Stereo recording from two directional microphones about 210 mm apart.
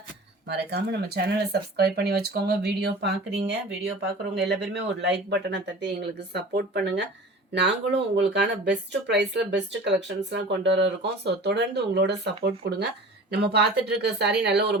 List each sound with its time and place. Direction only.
0.4 s speech: 55° right (ahead or behind)